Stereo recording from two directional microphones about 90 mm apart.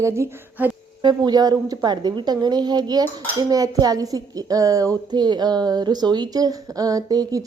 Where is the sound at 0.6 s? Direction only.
20° right (ahead or behind).